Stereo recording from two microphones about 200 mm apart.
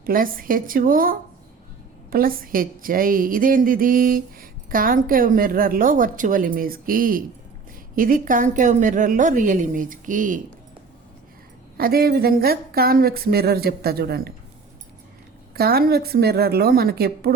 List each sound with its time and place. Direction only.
0.0 s a woman's voice: 45° right (ahead or behind)
11.8 s a woman's voice: 50° right (ahead or behind)
15.5 s a woman's voice: 50° right (ahead or behind)